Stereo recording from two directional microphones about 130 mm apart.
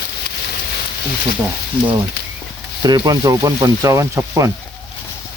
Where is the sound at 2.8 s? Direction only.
30° right (ahead or behind).